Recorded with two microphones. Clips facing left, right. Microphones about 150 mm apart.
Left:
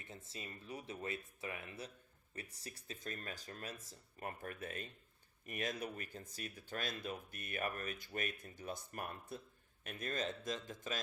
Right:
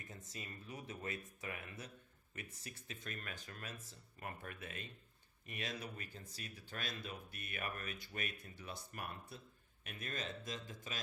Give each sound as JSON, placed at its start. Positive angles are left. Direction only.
{"t": 0.0, "sound": "speech", "side_deg": 30}